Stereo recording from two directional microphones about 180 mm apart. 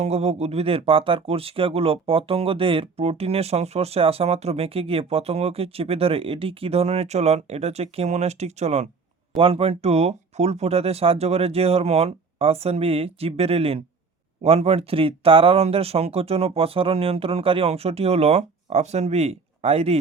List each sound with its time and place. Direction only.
0.0 s speech: 35° right (ahead or behind)